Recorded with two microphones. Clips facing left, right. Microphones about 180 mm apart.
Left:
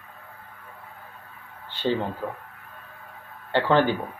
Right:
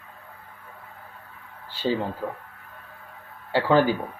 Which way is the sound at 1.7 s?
5° right (ahead or behind).